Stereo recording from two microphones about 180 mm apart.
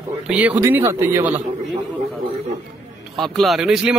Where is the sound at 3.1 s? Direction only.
Centre (ahead or behind).